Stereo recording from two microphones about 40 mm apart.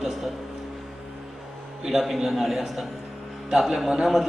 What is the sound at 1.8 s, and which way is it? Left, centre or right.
A man's voice, centre.